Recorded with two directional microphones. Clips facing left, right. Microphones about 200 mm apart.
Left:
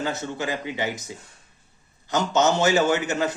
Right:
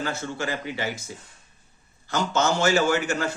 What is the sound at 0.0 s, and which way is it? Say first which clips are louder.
A man's voice: left 1 dB; 20° left (ahead or behind).